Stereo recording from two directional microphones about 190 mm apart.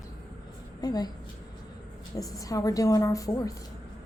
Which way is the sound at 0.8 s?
20° left (ahead or behind).